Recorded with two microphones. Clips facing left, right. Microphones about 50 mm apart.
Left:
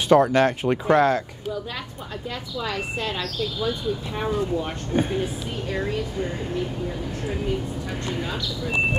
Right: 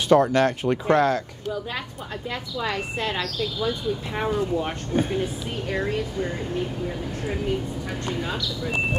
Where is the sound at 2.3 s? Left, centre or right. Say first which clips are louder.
Right 1 dB; right.